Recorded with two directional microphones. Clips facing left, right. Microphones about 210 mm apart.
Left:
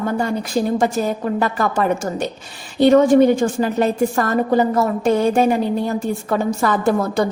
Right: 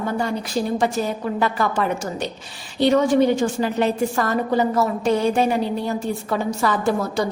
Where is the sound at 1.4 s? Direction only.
45° left (ahead or behind).